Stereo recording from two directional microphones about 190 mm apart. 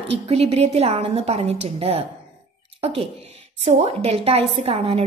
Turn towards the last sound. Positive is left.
turn(degrees=-30)  # may be behind; listen again after turning